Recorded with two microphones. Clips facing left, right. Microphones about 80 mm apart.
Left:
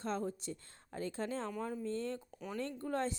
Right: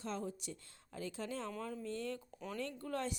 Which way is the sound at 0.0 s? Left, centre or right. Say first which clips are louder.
Left 4 dB; left.